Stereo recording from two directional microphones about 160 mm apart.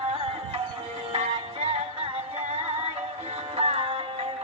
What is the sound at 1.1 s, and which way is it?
Music, 40° right (ahead or behind).